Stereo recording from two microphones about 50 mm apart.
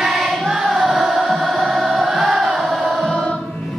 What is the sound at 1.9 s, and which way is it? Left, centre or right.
Crowd, centre.